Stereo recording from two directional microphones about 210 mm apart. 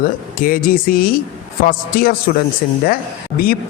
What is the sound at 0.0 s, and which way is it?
Speech, 40° left (ahead or behind).